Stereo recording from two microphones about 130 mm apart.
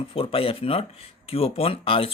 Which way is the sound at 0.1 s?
45° left (ahead or behind).